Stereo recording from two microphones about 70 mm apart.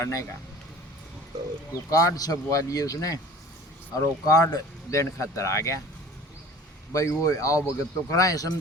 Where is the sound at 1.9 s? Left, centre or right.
Left.